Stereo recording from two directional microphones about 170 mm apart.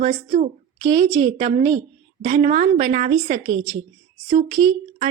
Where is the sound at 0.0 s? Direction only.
45° right (ahead or behind).